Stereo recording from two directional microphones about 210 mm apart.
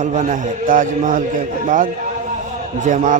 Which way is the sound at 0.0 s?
35° right (ahead or behind).